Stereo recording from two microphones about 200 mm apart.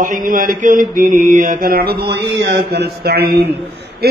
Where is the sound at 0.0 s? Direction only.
40° right (ahead or behind).